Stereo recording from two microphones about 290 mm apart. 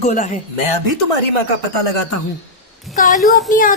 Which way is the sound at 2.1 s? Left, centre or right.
Left.